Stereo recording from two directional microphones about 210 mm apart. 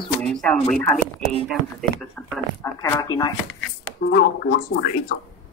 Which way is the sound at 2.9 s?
20° left (ahead or behind).